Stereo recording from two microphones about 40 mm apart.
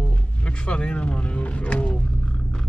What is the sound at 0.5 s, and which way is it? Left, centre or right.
Speech, left.